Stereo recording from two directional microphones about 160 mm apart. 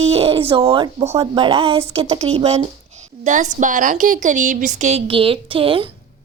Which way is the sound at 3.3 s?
50° right (ahead or behind).